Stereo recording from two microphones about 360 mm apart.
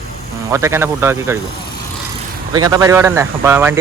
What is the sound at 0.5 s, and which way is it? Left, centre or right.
Speech, centre.